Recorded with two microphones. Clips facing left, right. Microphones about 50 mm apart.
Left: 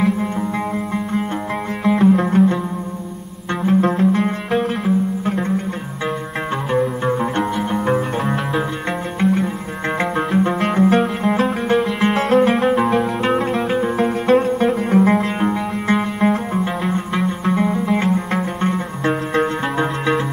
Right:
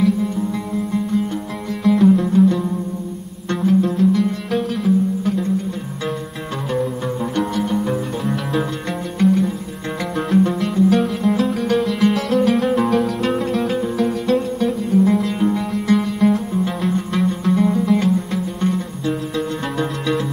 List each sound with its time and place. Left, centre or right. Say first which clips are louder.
2.0 s music: even; left
3.6 s music: even; left
4.5 s music: even; left
7.1 s music: left 3 dB; left
7.5 s music: even; left
7.8 s music: left 3 dB; left
10.6 s music: left 1 dB; left
13.8 s music: left 2 dB; left
19.0 s music: left 5 dB; left
19.8 s music: left 2 dB; left